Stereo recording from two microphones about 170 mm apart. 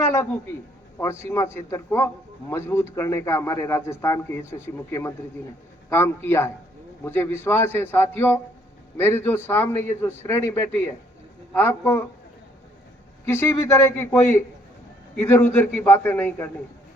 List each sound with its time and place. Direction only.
0.0 s a man's voice: 15° left (ahead or behind)
13.2 s a man's voice: 15° left (ahead or behind)